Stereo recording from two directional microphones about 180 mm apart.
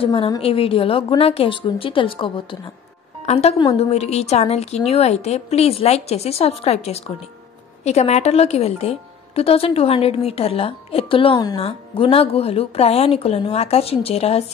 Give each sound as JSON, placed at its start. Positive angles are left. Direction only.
{"t": 0.0, "sound": "a woman's voice", "side_deg": 25}